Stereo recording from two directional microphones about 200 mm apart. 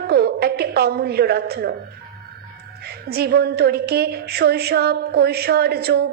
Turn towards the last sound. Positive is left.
turn(degrees=-55)  # may be behind; listen again after turning